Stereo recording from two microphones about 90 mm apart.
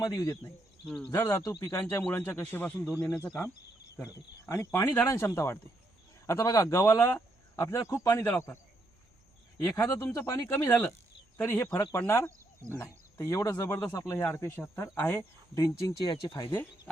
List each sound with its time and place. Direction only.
0.0 s speech: 45° left (ahead or behind)
2.0 s speech: 20° left (ahead or behind)
4.4 s speech: 30° left (ahead or behind)
9.6 s speech: 30° left (ahead or behind)
14.5 s speech: 25° left (ahead or behind)
16.0 s speech: 60° left (ahead or behind)
16.5 s speech: 25° left (ahead or behind)